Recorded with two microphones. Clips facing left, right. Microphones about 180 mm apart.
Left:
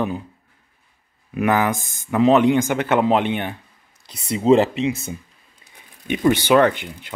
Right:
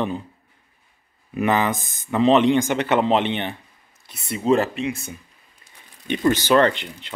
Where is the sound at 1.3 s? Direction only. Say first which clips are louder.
Left 1 dB; 5° left (ahead or behind).